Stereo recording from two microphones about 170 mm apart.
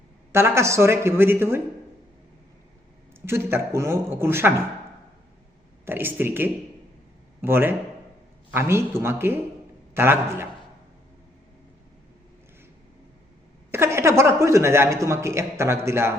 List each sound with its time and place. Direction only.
0.3 s speech: 15° right (ahead or behind)
3.2 s speech: 15° right (ahead or behind)
5.8 s speech: 10° right (ahead or behind)
13.7 s speech: 15° right (ahead or behind)